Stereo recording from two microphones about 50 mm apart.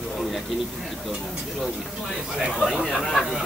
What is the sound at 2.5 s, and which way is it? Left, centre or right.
Speech, centre.